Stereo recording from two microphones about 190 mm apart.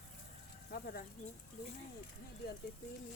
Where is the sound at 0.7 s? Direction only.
55° left (ahead or behind).